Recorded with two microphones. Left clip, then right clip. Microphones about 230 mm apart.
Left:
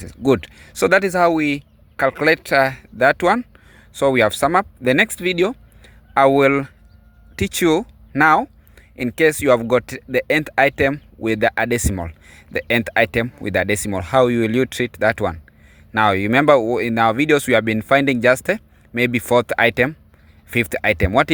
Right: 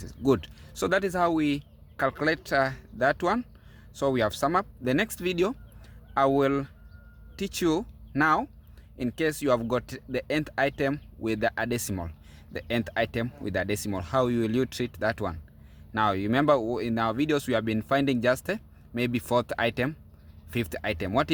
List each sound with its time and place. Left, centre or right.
0.3 s speech: left